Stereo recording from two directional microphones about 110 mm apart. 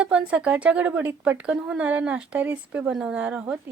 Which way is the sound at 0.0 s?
10° right (ahead or behind).